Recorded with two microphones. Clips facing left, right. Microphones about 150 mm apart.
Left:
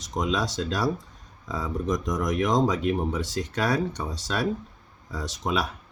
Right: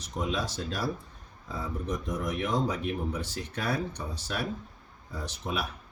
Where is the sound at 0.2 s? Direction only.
90° left.